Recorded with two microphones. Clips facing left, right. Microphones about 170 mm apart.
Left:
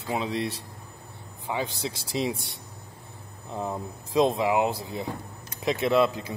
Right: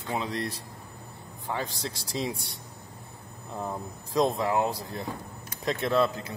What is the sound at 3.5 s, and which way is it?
A man's voice, 5° left (ahead or behind).